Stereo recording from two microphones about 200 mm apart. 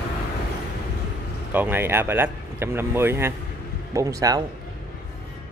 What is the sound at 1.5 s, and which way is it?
Speech, 10° right (ahead or behind).